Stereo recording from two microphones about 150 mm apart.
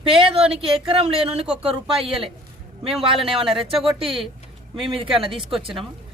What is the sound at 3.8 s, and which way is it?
Speech, 35° right (ahead or behind).